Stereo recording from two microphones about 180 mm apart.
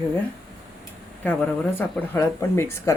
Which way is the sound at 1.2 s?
10° left (ahead or behind).